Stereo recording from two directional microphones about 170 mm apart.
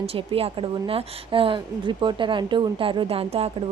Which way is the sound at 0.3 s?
35° right (ahead or behind).